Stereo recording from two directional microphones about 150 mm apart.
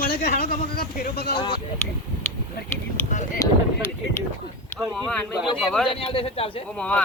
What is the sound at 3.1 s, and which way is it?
Boat, 55° left (ahead or behind).